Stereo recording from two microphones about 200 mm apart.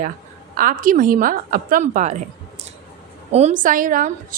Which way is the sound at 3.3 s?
35° right (ahead or behind).